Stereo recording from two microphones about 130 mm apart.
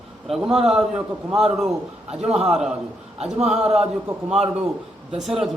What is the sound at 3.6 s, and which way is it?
Speech, 55° right (ahead or behind).